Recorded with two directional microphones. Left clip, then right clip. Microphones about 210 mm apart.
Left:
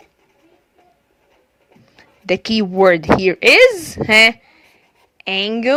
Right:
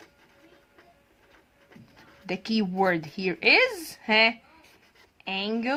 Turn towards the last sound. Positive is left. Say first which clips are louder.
# left 12 dB
turn(degrees=35)  # may be behind; listen again after turning